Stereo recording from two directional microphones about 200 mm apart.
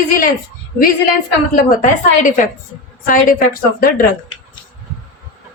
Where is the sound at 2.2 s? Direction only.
40° left (ahead or behind).